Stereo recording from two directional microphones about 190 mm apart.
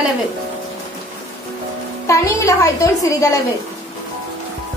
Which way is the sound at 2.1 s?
15° left (ahead or behind).